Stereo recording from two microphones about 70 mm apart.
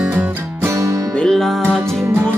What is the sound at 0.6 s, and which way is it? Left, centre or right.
Music, right.